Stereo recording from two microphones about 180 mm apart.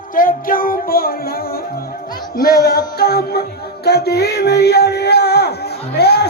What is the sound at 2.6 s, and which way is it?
Music, 60° left (ahead or behind).